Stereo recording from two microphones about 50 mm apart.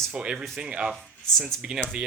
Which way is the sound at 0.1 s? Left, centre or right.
Centre.